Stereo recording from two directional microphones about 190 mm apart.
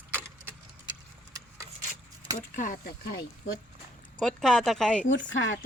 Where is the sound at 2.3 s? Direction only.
45° left (ahead or behind).